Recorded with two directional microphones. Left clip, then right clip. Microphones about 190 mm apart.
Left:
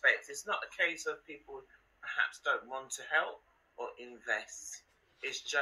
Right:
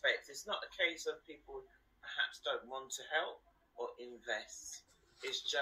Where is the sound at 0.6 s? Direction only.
40° left (ahead or behind).